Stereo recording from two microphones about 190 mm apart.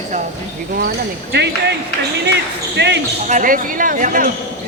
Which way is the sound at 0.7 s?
55° right (ahead or behind).